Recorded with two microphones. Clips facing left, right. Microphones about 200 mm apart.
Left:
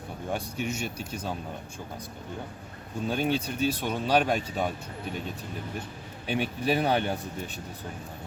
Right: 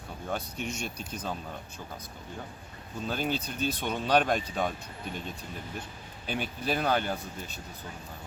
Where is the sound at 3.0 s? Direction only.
10° left (ahead or behind).